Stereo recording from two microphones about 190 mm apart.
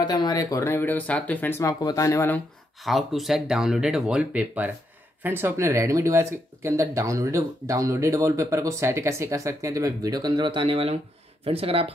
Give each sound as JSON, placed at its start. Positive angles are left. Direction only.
{"t": 0.0, "sound": "speech", "side_deg": 20}
{"t": 2.8, "sound": "speech", "side_deg": 0}